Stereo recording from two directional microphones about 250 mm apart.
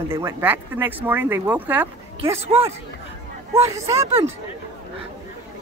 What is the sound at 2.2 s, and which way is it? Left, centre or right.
Speech, right.